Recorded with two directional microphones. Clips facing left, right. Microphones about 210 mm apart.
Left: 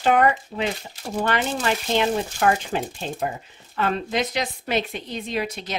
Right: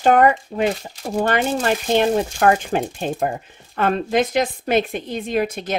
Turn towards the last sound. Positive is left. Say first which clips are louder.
# right 6 dB
turn(degrees=-50)  # may be behind; listen again after turning